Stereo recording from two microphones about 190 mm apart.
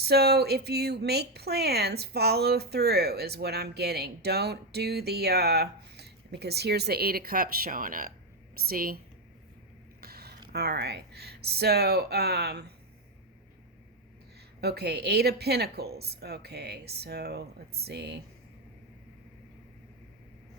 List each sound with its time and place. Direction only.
0.0 s a woman's voice: 60° right (ahead or behind)
10.0 s a sound: 55° right (ahead or behind)
10.5 s speech: 55° right (ahead or behind)
14.6 s speech: 60° right (ahead or behind)